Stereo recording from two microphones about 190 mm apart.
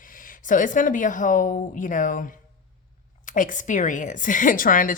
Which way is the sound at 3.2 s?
45° left (ahead or behind).